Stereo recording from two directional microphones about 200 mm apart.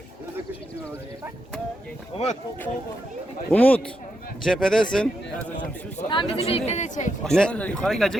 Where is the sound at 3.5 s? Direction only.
10° left (ahead or behind).